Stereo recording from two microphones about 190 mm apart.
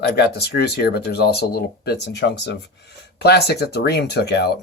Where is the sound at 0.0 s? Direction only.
60° left (ahead or behind).